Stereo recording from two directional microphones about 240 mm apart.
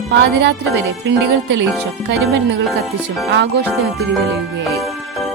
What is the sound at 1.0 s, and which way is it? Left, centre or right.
Speech, right.